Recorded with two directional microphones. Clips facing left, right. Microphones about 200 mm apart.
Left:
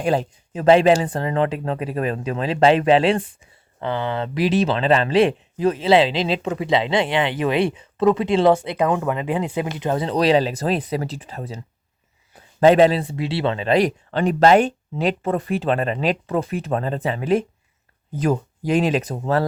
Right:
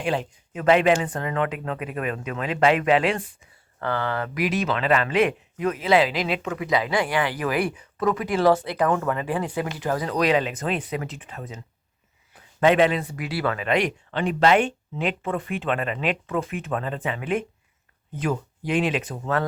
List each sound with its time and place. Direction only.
0.0 s speech: 35° left (ahead or behind)
3.8 s speech: 20° left (ahead or behind)